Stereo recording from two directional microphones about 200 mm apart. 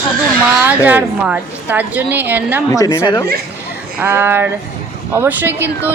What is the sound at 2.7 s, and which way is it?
Speech, 15° left (ahead or behind).